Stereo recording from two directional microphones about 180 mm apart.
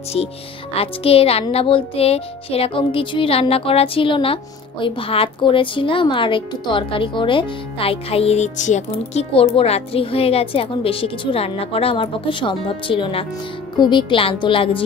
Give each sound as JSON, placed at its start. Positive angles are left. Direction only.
{"t": 0.7, "sound": "music", "side_deg": 35}
{"t": 13.7, "sound": "a woman's voice", "side_deg": 25}